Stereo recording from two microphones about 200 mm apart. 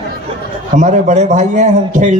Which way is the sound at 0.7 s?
35° right (ahead or behind).